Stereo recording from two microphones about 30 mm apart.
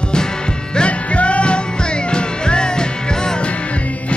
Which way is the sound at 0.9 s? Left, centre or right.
Left.